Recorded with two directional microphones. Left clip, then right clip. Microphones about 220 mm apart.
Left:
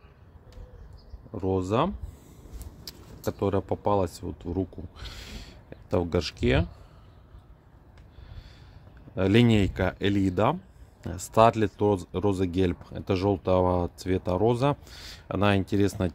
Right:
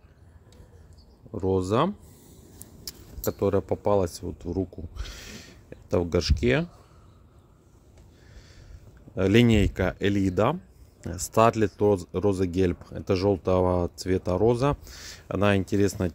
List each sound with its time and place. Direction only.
1.3 s speech: 20° right (ahead or behind)
9.1 s speech: 10° right (ahead or behind)